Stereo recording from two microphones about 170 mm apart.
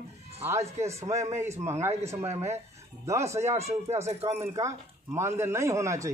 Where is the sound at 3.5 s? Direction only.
40° right (ahead or behind).